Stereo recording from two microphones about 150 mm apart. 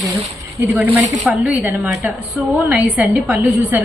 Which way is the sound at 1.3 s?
10° right (ahead or behind).